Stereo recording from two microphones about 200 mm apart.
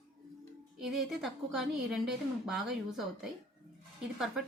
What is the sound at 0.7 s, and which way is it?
A woman's voice, centre (ahead or behind).